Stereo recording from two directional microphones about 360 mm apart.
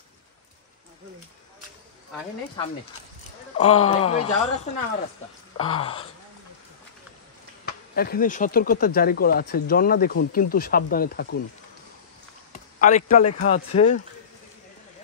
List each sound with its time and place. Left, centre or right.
3.5 s speech: centre
5.6 s speech: centre
7.6 s speech: left
12.5 s a sound: left
13.4 s speech: centre